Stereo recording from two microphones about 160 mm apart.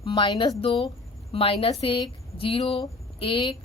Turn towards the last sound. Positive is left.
turn(degrees=30)  # may be behind; listen again after turning